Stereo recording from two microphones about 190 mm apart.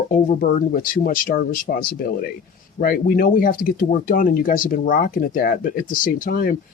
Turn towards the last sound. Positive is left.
turn(degrees=45)  # may be behind; listen again after turning